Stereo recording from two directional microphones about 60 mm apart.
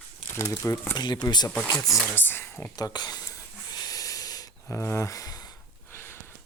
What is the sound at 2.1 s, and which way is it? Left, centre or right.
Speech, left.